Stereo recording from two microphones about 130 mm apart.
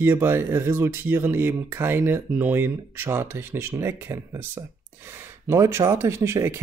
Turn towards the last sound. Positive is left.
turn(degrees=-20)  # may be behind; listen again after turning